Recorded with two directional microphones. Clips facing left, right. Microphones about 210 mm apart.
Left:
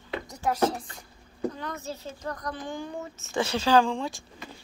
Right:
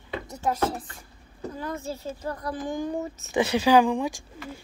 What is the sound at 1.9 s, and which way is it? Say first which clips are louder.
Speech: right 3 dB; 10° right (ahead or behind).